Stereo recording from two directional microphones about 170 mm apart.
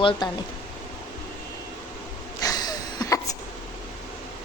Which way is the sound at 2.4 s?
25° left (ahead or behind).